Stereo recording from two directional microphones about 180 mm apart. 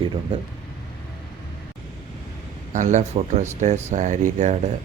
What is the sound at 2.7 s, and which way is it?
Speech, 40° right (ahead or behind).